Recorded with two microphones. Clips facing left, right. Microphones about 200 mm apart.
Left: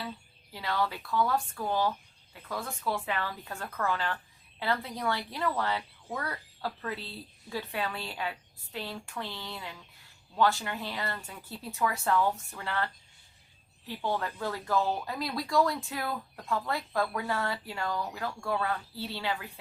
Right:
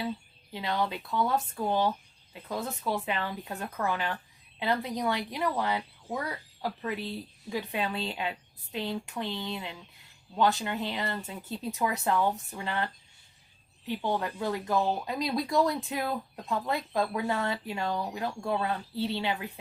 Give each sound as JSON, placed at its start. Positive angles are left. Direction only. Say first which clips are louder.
{"t": 0.5, "sound": "speech", "louder": "right 1 dB", "side_deg": -20}